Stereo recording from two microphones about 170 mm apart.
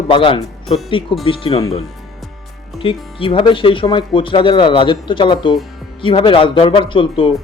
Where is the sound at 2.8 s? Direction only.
30° left (ahead or behind).